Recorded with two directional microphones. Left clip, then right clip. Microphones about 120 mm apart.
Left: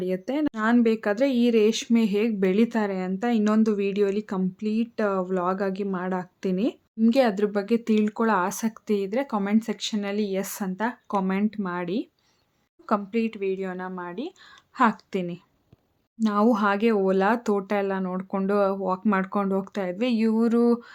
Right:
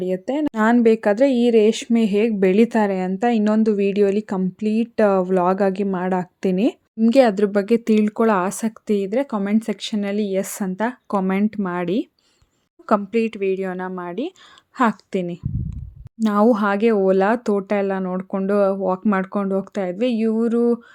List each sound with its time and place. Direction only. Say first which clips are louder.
0.0 s a woman's voice: right 4 dB; 30° right (ahead or behind)
0.5 s speech: right 8 dB; 60° right (ahead or behind)
0.8 s speech: right 8 dB; 45° right (ahead or behind)
3.5 s speech: right 5 dB; 30° right (ahead or behind); by 12.0 s 55° right (ahead or behind)
13.1 s speech: right 6 dB; 50° right (ahead or behind)
14.8 s speech: right 3 dB; 40° right (ahead or behind)
16.5 s speech: right 3 dB; 35° right (ahead or behind); by 20.8 s 15° right (ahead or behind)